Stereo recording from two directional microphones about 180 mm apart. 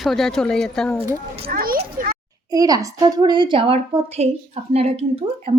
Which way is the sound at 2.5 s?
20° right (ahead or behind).